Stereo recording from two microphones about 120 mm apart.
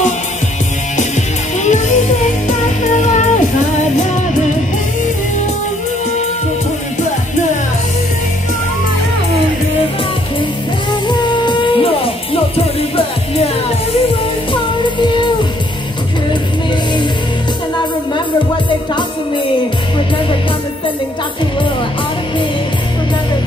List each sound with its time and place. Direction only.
1.6 s music: 85° left
11.1 s music: 40° left (ahead or behind)
14.5 s music: 40° left (ahead or behind)